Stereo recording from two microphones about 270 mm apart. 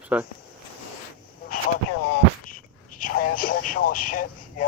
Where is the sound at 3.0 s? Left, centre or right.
Left.